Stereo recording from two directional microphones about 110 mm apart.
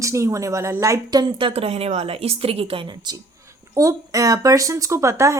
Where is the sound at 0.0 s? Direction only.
25° right (ahead or behind).